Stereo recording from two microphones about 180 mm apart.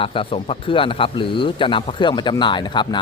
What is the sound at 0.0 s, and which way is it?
Speech, 30° left (ahead or behind).